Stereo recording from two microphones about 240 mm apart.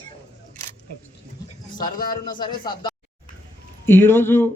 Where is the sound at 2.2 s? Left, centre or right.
Centre.